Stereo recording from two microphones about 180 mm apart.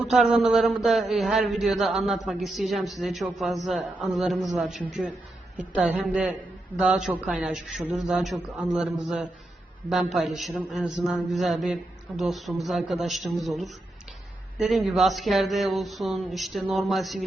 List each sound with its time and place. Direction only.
0.1 s a man's voice: 5° right (ahead or behind)